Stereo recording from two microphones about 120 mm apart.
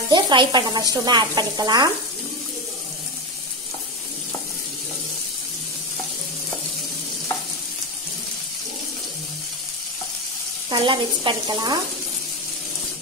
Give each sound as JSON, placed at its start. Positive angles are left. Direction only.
{"t": 0.1, "sound": "speech", "side_deg": -40}
{"t": 10.7, "sound": "speech", "side_deg": -40}